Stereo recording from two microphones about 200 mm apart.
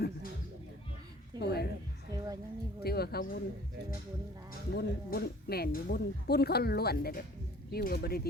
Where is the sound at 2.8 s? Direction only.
50° left (ahead or behind).